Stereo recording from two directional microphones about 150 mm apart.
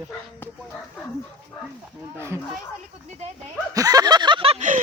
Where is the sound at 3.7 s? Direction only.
25° right (ahead or behind).